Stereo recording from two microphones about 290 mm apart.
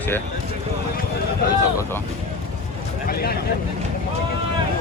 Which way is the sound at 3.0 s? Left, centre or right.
Left.